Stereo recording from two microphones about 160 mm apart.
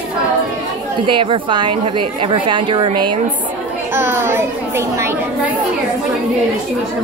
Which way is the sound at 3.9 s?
15° right (ahead or behind).